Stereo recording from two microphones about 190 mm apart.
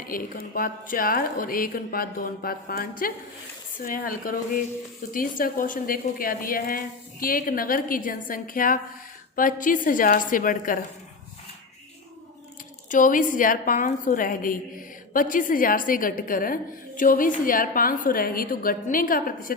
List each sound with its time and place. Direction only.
0.0 s a woman's voice: 50° left (ahead or behind)
12.9 s a woman's voice: 45° left (ahead or behind)